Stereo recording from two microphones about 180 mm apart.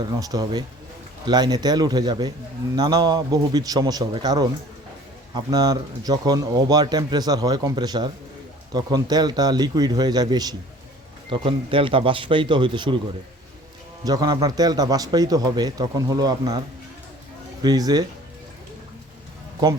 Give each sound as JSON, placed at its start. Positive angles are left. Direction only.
{"t": 0.0, "sound": "speech", "side_deg": -20}
{"t": 14.0, "sound": "speech", "side_deg": -20}